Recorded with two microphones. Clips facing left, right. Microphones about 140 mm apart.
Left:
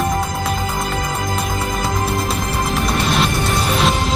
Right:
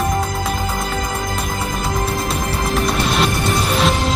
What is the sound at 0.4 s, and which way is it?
Music, centre (ahead or behind).